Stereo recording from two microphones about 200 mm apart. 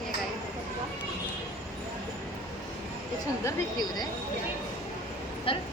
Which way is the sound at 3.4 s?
20° left (ahead or behind).